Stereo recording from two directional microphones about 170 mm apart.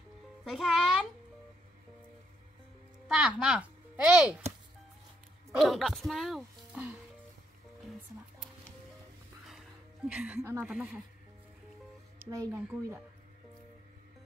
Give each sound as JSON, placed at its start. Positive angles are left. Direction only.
{"t": 0.5, "sound": "a child's voice", "side_deg": 0}
{"t": 3.1, "sound": "speech", "side_deg": -5}
{"t": 5.6, "sound": "speech", "side_deg": 0}
{"t": 10.0, "sound": "a woman's voice", "side_deg": -10}
{"t": 12.3, "sound": "speech", "side_deg": -20}